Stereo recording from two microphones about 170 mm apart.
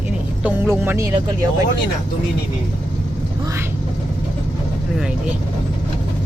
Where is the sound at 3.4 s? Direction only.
15° right (ahead or behind).